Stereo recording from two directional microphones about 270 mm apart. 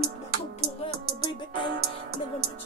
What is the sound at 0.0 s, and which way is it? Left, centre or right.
Music, right.